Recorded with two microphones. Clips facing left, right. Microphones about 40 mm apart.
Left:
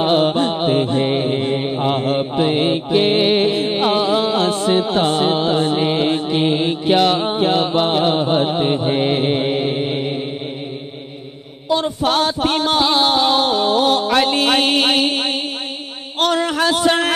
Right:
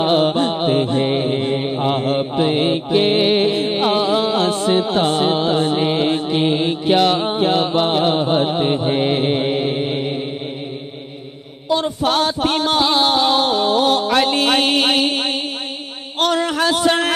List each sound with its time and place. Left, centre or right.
0.0 s mantra: centre
11.7 s music: centre
16.2 s a sound: centre